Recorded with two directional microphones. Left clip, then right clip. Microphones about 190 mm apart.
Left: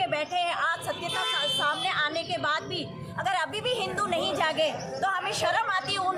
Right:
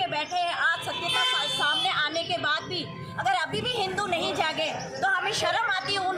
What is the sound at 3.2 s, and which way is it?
Speech, 30° left (ahead or behind).